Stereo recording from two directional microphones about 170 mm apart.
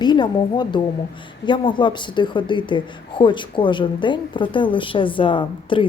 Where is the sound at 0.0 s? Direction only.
25° left (ahead or behind).